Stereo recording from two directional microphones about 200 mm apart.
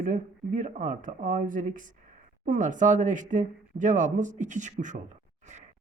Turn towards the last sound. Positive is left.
turn(degrees=-35)  # may be behind; listen again after turning